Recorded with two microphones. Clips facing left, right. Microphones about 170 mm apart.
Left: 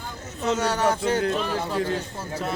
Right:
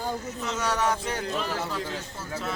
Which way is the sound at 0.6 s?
30° left (ahead or behind).